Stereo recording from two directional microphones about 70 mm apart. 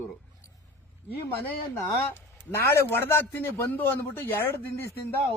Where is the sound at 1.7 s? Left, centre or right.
Left.